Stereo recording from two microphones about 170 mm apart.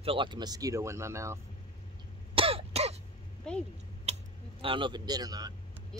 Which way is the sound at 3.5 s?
5° left (ahead or behind).